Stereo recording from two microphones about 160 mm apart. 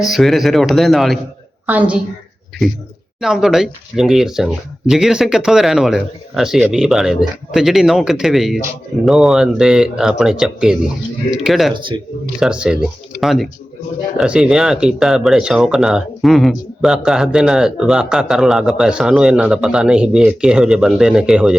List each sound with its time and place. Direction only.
0.0 s a woman's voice: centre (ahead or behind)
3.2 s speech: 5° right (ahead or behind)